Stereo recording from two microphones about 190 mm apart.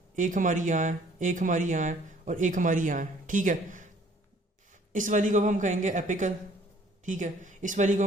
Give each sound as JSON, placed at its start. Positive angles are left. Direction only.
{"t": 0.2, "sound": "speech", "side_deg": -40}